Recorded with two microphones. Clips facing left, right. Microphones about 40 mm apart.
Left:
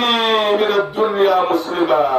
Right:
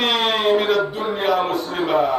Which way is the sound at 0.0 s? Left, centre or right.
Centre.